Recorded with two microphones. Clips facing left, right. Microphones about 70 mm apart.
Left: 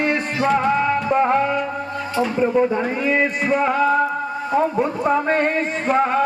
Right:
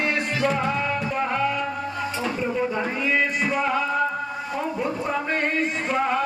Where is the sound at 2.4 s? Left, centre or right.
Left.